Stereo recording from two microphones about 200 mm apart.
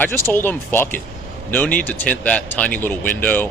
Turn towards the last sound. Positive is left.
turn(degrees=10)  # may be behind; listen again after turning